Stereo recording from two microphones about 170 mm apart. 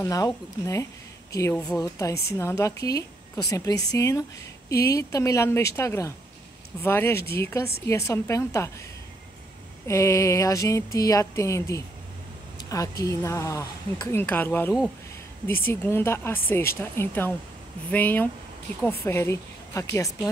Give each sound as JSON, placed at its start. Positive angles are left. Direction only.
{"t": 0.0, "sound": "a woman's voice", "side_deg": 20}
{"t": 9.8, "sound": "a woman's voice", "side_deg": 20}
{"t": 12.5, "sound": "a sound", "side_deg": 20}
{"t": 13.0, "sound": "speech", "side_deg": 15}